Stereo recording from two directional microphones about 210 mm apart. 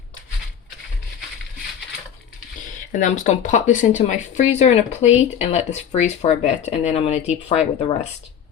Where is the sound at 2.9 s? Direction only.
35° left (ahead or behind).